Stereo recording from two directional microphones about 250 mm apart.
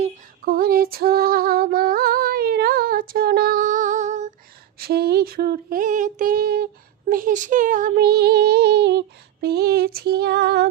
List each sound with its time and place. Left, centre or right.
0.0 s female singing: right
4.8 s a sound: right
7.1 s child singing: right